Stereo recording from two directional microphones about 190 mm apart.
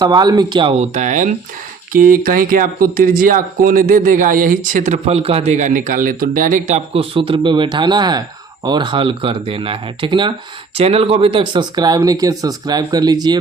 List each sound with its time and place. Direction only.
0.0 s speech: 20° right (ahead or behind)
0.8 s speech: 40° right (ahead or behind); by 13.4 s 20° right (ahead or behind)